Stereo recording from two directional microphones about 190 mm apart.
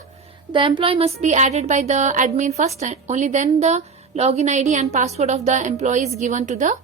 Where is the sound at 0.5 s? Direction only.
25° right (ahead or behind).